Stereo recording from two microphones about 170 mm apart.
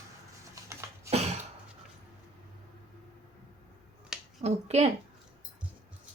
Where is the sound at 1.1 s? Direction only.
40° right (ahead or behind).